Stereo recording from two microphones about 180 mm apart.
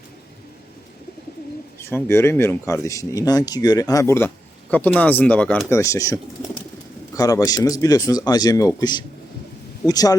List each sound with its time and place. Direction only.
1.8 s speech: 15° left (ahead or behind)